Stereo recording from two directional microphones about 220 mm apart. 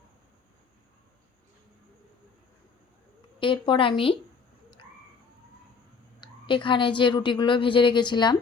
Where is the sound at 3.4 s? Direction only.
20° left (ahead or behind).